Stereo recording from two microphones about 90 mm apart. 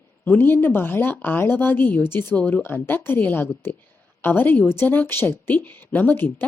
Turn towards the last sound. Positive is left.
turn(degrees=20)  # may be behind; listen again after turning